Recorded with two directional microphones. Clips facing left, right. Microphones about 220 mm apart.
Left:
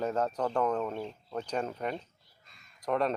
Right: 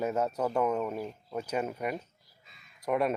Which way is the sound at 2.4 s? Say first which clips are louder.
Right 1 dB; 5° right (ahead or behind).